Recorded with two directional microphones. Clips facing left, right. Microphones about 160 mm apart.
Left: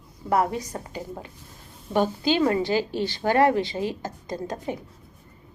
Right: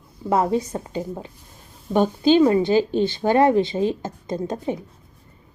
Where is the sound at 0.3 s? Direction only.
25° right (ahead or behind).